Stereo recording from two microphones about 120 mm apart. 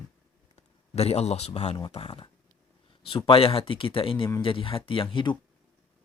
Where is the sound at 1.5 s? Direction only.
60° left (ahead or behind).